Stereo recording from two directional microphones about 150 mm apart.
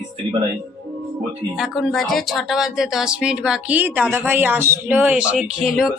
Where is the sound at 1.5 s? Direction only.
5° right (ahead or behind).